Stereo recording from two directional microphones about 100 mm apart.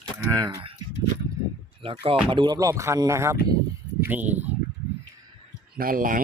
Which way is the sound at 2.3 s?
50° right (ahead or behind).